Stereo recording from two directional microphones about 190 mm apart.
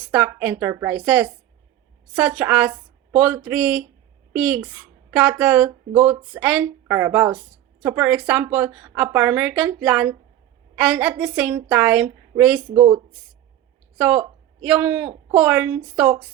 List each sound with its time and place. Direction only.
0.1 s a woman's voice: 10° right (ahead or behind)
12.7 s speech: 20° right (ahead or behind)
14.6 s a woman's voice: 5° right (ahead or behind)